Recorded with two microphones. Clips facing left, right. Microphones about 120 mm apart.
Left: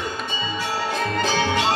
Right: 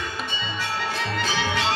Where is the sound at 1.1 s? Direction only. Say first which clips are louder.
Left 5 dB; 40° left (ahead or behind).